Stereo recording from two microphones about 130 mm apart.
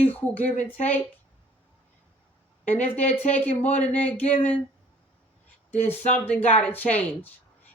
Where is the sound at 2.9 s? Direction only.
60° left (ahead or behind).